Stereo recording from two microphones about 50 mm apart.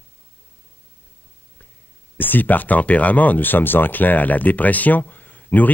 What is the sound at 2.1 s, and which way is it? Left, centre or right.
Speech, left.